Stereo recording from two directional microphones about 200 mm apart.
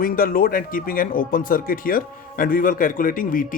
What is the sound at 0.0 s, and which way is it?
Speech, 45° left (ahead or behind).